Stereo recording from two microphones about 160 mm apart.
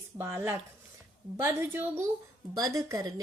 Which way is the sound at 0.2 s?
15° right (ahead or behind).